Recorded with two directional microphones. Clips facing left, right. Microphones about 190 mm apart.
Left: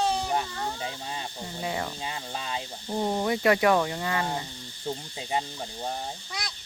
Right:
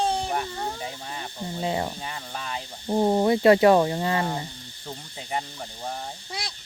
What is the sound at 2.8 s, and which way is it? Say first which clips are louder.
Speech: right 7 dB; 30° right (ahead or behind).